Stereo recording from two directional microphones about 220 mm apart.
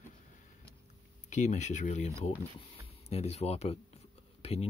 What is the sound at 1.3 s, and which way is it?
Speech, 35° left (ahead or behind).